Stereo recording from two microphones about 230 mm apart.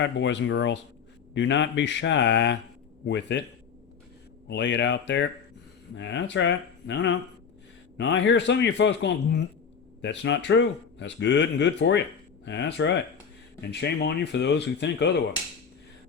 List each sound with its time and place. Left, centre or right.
0.0 s speech: left
4.4 s speech: left